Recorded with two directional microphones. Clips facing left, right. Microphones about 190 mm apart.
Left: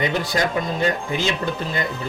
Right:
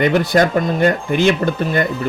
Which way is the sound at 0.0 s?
60° right (ahead or behind).